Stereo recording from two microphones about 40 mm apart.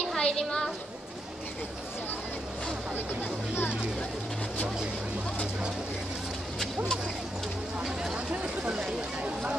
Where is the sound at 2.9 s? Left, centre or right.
Left.